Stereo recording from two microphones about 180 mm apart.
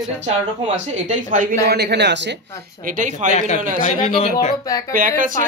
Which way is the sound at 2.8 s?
45° right (ahead or behind).